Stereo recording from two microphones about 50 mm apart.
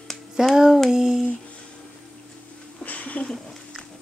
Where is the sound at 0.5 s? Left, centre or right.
Centre.